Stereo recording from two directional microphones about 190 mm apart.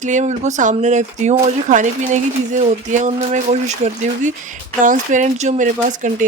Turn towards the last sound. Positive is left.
turn(degrees=-40)  # may be behind; listen again after turning